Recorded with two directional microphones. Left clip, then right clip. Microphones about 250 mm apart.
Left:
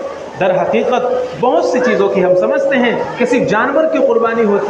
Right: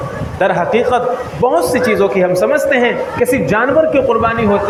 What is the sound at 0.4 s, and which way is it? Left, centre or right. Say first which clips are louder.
A man's voice: even; right.